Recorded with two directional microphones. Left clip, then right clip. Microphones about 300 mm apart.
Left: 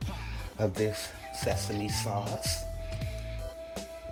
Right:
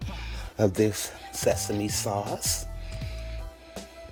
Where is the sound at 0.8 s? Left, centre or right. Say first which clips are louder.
Right 4 dB; right.